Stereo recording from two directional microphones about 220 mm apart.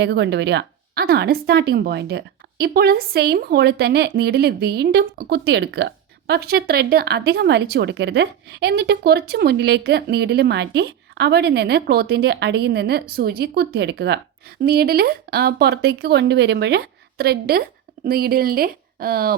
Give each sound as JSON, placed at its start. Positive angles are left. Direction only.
{"t": 0.0, "sound": "speech", "side_deg": -50}